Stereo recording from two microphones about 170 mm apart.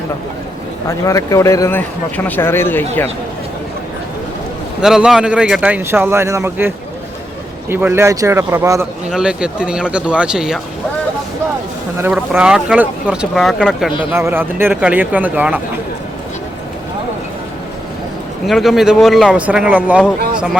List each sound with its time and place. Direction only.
0.9 s speech: 20° left (ahead or behind)
4.8 s speech: 5° right (ahead or behind)
9.0 s speech: 5° right (ahead or behind)
11.9 s speech: 10° right (ahead or behind)
14.0 s speech: 15° right (ahead or behind)
18.4 s speech: centre (ahead or behind)